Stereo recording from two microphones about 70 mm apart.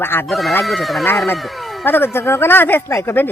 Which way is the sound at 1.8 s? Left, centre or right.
Left.